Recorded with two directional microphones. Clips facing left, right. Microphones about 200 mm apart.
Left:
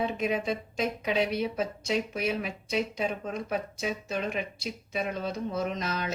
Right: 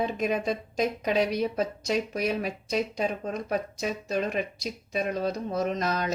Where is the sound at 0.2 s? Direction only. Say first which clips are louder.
Right 2 dB; 40° right (ahead or behind).